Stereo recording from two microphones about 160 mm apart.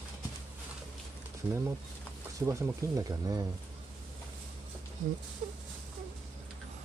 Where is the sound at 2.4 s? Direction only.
20° right (ahead or behind).